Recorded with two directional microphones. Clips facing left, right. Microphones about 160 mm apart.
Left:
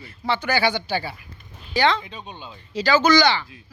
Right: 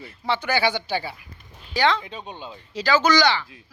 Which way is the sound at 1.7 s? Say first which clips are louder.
Left 1 dB; 10° right (ahead or behind).